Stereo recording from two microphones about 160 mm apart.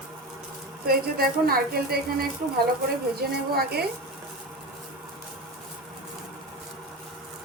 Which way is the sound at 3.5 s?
75° right (ahead or behind).